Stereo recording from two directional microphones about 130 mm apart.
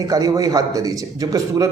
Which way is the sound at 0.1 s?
25° right (ahead or behind).